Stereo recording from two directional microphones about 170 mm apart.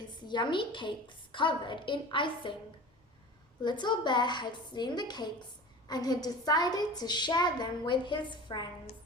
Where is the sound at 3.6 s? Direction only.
25° left (ahead or behind).